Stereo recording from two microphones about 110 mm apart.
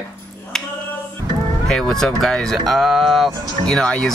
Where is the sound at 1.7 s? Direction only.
5° left (ahead or behind).